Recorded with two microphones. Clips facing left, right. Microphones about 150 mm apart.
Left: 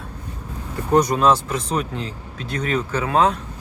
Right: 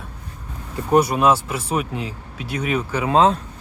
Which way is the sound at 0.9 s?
10° right (ahead or behind).